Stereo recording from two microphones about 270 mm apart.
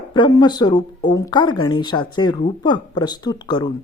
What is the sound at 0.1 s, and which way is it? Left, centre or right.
A woman's voice, centre.